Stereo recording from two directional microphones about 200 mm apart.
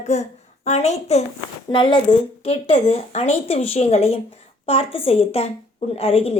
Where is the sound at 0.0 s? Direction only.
35° left (ahead or behind).